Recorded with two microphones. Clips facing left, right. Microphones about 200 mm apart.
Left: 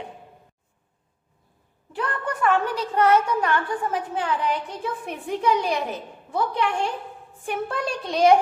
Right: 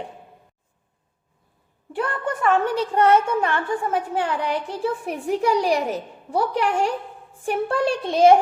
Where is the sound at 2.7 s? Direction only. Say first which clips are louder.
Right 2 dB; 30° right (ahead or behind).